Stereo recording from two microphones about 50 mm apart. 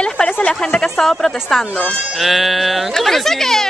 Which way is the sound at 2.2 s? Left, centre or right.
Centre.